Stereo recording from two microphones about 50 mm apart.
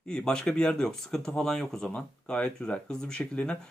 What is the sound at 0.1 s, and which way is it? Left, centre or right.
Speech, centre.